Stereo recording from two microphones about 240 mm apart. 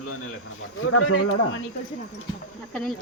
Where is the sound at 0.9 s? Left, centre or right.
Left.